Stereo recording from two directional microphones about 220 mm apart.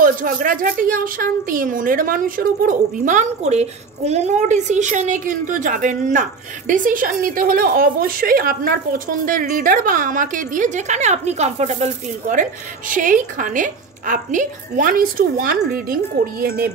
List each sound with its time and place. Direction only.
0.0 s speech: 40° right (ahead or behind)